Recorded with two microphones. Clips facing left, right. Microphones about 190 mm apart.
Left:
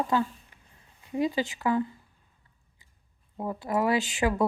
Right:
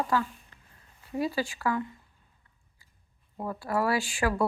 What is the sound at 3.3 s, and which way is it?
Speech, 20° left (ahead or behind).